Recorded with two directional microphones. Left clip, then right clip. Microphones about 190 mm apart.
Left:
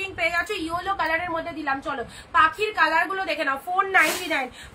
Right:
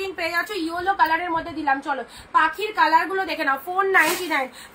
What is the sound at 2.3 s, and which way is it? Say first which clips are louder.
A woman's voice: even; 15° left (ahead or behind).